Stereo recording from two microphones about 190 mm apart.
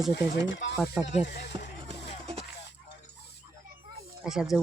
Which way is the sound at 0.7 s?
Centre (ahead or behind).